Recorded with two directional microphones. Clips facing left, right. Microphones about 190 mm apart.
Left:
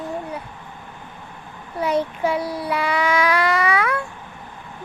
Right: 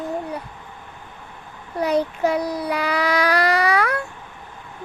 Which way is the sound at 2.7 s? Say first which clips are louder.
Left 2 dB; 40° right (ahead or behind).